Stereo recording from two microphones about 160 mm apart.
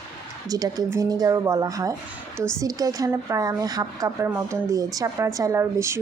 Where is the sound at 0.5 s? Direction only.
25° right (ahead or behind).